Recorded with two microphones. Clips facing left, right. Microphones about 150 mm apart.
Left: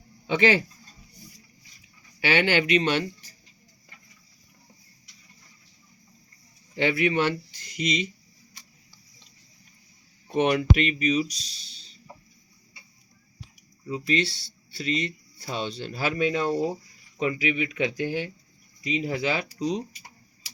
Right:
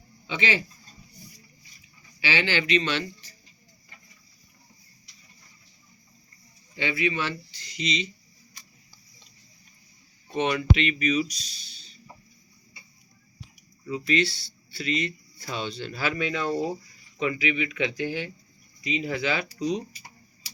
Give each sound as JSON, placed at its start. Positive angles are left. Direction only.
{"t": 0.3, "sound": "speech", "side_deg": 55}
{"t": 2.2, "sound": "speech", "side_deg": 55}
{"t": 6.7, "sound": "speech", "side_deg": 65}
{"t": 10.3, "sound": "speech", "side_deg": 60}
{"t": 10.8, "sound": "speech", "side_deg": 35}
{"t": 13.8, "sound": "speech", "side_deg": 35}